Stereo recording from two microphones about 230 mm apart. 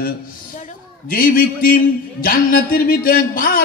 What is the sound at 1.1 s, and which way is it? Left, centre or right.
Speech, left.